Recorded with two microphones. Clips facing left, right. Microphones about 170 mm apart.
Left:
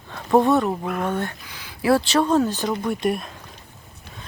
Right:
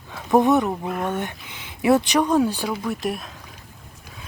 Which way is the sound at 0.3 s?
20° right (ahead or behind).